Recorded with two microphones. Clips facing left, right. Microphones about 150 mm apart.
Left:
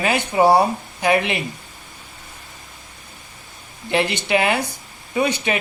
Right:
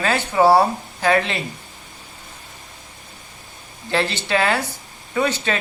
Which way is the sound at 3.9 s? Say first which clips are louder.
Left 2 dB; 15° left (ahead or behind).